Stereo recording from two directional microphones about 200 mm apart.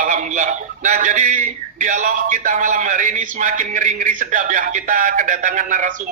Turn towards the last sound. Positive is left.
turn(degrees=-40)  # may be behind; listen again after turning